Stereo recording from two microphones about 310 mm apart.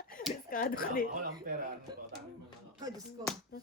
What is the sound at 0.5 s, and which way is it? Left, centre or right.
Speech, left.